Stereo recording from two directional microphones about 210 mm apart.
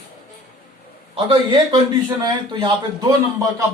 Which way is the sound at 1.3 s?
20° right (ahead or behind).